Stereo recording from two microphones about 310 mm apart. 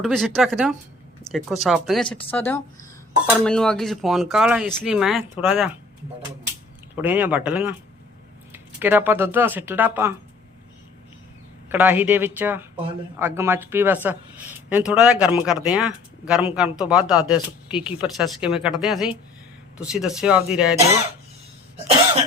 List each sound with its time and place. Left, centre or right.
0.0 s speech: centre
2.0 s speech: centre
6.9 s speech: centre
11.7 s speech: centre